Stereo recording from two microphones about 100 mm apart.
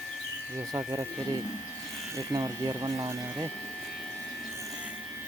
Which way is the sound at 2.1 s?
30° right (ahead or behind).